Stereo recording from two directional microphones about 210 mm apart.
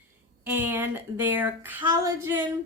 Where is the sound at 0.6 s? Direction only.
10° right (ahead or behind).